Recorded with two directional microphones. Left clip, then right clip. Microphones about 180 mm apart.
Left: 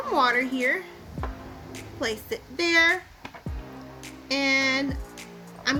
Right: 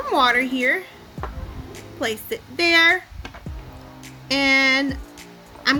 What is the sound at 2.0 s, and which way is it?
Speech, 15° right (ahead or behind).